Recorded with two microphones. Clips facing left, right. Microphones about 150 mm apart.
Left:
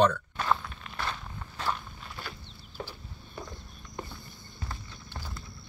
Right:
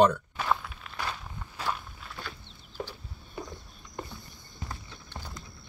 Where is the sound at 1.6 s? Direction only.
Centre (ahead or behind).